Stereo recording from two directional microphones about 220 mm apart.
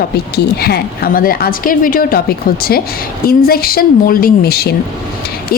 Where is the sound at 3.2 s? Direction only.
45° left (ahead or behind).